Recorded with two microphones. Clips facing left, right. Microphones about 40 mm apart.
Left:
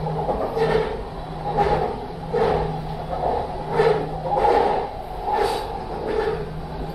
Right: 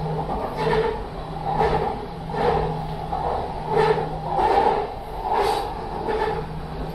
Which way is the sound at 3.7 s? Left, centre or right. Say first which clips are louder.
Left 1 dB; centre.